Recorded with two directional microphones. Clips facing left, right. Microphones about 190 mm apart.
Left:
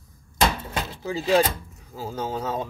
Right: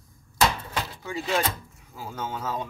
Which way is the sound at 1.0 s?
35° left (ahead or behind).